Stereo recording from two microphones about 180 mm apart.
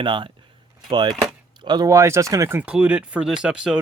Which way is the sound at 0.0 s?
25° right (ahead or behind).